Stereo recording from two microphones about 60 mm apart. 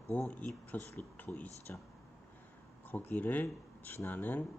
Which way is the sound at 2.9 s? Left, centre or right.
Left.